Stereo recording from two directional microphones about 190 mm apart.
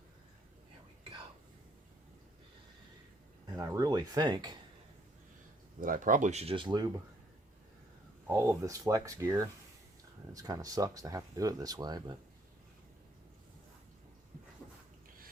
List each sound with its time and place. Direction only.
3.5 s speech: 15° right (ahead or behind)
5.8 s speech: 45° right (ahead or behind); by 6.9 s 25° right (ahead or behind)
8.3 s speech: 15° right (ahead or behind)